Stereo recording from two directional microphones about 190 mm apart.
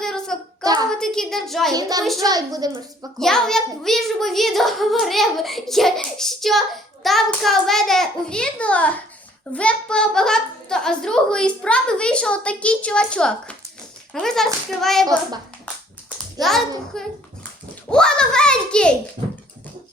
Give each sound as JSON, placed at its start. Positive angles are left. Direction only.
{"t": 0.0, "sound": "a sound", "side_deg": 0}
{"t": 0.6, "sound": "a sound", "side_deg": -20}
{"t": 0.9, "sound": "a child's voice", "side_deg": 5}
{"t": 1.7, "sound": "a child's voice", "side_deg": -20}
{"t": 3.2, "sound": "a child's voice", "side_deg": 0}
{"t": 16.4, "sound": "a child's voice", "side_deg": 0}